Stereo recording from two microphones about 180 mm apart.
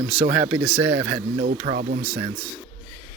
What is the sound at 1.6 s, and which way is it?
Speech, 50° right (ahead or behind).